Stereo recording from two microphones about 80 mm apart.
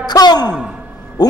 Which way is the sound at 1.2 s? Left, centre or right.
Left.